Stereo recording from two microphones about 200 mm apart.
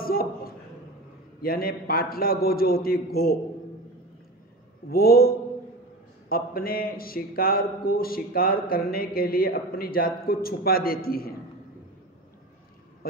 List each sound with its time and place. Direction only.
0.0 s a sound: 45° left (ahead or behind)
1.4 s speech: 50° left (ahead or behind)
4.8 s speech: 50° left (ahead or behind)